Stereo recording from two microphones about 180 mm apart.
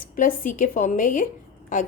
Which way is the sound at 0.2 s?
45° left (ahead or behind).